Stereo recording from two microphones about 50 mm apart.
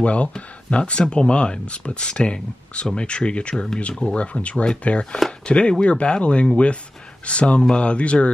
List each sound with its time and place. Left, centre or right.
0.0 s speech: left